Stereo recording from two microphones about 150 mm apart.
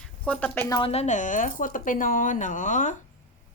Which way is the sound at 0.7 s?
40° left (ahead or behind).